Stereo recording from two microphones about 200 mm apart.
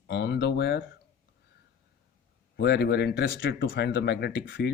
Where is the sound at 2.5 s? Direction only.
55° left (ahead or behind).